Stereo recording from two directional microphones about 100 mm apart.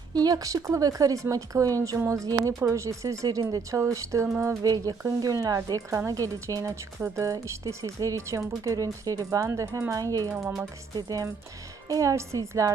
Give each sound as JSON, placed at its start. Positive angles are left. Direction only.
{"t": 0.1, "sound": "speech", "side_deg": -40}